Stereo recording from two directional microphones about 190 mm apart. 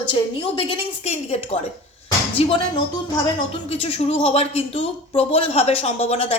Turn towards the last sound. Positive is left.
turn(degrees=35)  # may be behind; listen again after turning